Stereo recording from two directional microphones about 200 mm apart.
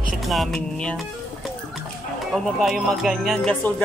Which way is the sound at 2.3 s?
Centre (ahead or behind).